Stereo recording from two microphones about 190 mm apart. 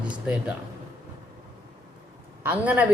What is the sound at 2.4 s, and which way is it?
Speech, 10° right (ahead or behind).